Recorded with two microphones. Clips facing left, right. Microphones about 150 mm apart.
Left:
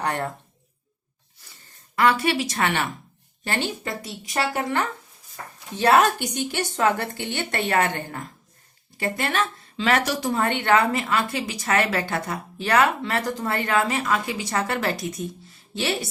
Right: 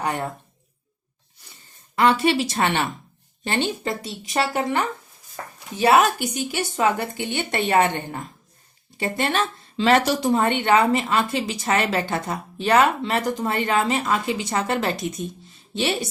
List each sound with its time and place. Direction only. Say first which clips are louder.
0.0 s speech: right 1 dB; 10° right (ahead or behind)
2.0 s a woman's voice: right 2 dB; 25° right (ahead or behind)